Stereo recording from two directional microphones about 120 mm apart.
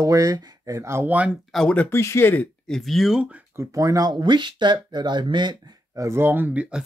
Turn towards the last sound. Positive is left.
turn(degrees=-15)  # may be behind; listen again after turning